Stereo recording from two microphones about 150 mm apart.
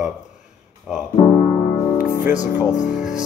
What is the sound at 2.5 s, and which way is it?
Speech, 10° right (ahead or behind).